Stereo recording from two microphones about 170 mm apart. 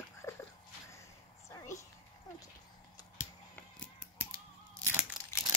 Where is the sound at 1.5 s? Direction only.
20° left (ahead or behind).